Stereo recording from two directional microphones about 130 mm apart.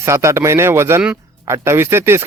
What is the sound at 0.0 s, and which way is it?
A man's voice, 20° right (ahead or behind).